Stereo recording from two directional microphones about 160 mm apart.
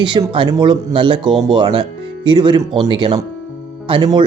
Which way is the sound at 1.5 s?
30° right (ahead or behind).